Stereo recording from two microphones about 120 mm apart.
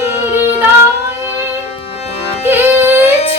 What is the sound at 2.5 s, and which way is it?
Music, 20° right (ahead or behind).